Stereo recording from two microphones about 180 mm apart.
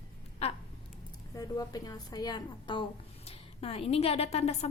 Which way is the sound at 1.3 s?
20° left (ahead or behind).